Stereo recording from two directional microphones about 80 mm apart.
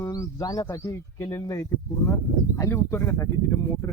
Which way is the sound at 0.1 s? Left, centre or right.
Left.